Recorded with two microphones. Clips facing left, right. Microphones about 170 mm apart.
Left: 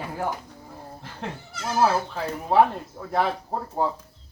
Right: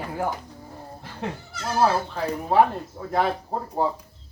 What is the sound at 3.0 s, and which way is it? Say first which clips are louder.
Speech: right 3 dB; 5° right (ahead or behind).